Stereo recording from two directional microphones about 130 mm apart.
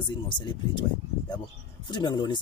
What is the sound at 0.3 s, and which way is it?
Speech, 40° left (ahead or behind).